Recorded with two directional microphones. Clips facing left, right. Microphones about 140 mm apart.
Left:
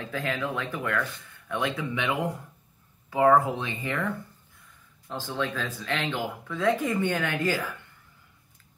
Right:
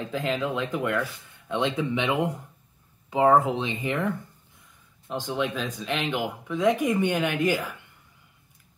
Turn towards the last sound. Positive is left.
turn(degrees=-15)  # may be behind; listen again after turning